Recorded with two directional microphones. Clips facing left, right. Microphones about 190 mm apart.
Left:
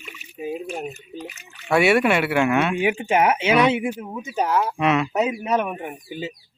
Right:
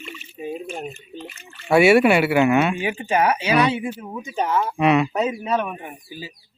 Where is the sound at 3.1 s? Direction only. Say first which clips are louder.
Right 1 dB; 20° left (ahead or behind); by 5.2 s centre (ahead or behind).